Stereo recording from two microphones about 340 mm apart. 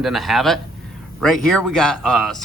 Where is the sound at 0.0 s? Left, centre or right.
Centre.